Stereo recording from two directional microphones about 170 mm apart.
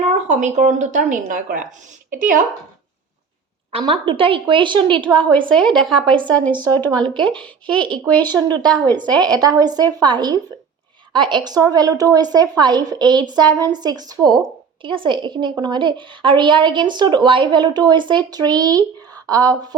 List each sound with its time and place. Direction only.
0.0 s speech: 45° right (ahead or behind)
3.7 s speech: 30° right (ahead or behind)
5.5 s speech: 5° left (ahead or behind)
6.1 s speech: 30° right (ahead or behind)
6.7 s speech: 10° left (ahead or behind)
7.0 s speech: 30° right (ahead or behind)
7.4 s speech: 5° left (ahead or behind)
8.4 s speech: 25° right (ahead or behind)
8.6 s speech: 5° left (ahead or behind)
9.2 s speech: 25° right (ahead or behind)